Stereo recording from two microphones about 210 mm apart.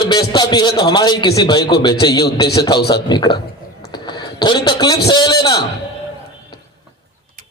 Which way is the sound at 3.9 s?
20° left (ahead or behind).